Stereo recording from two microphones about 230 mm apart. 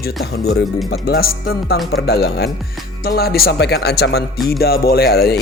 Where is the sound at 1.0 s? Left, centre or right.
Left.